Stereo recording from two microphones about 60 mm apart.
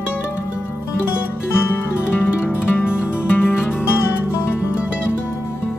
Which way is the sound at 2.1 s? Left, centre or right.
Left.